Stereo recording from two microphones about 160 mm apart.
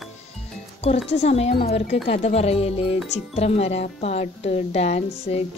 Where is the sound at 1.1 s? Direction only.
40° left (ahead or behind).